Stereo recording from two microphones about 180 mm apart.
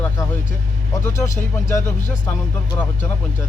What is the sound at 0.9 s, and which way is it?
Speech, 15° left (ahead or behind).